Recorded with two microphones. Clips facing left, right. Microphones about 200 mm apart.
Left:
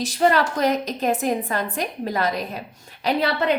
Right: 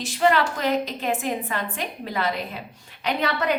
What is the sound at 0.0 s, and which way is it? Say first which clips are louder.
A woman's voice: left 2 dB; 40° left (ahead or behind).